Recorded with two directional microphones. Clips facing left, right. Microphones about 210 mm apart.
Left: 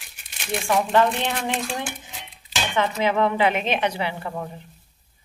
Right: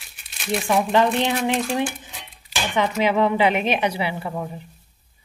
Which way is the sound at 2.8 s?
15° right (ahead or behind).